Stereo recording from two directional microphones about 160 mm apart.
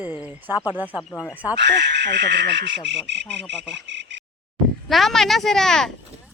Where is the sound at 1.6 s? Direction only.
90° right.